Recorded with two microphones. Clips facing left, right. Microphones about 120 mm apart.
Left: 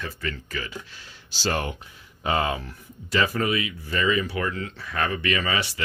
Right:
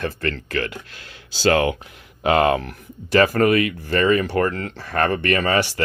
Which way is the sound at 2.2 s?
75° right (ahead or behind).